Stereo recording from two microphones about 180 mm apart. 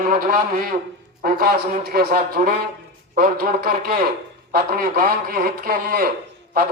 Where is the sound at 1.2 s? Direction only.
55° right (ahead or behind).